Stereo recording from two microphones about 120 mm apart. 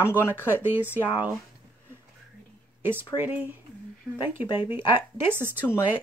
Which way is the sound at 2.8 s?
15° right (ahead or behind).